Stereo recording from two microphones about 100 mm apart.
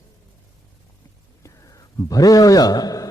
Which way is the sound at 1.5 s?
35° left (ahead or behind).